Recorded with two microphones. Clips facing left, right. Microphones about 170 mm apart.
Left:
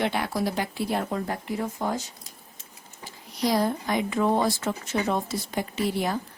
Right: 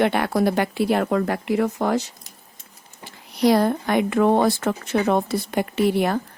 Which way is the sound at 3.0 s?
65° right (ahead or behind).